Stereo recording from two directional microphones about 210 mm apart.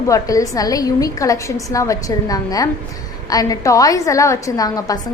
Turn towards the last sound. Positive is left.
turn(degrees=15)  # may be behind; listen again after turning